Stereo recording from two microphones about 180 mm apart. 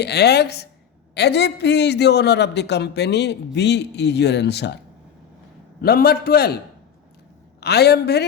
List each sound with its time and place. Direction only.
0.0 s a man's voice: 65° left (ahead or behind)
5.8 s a man's voice: 60° left (ahead or behind)
7.6 s a man's voice: 65° left (ahead or behind)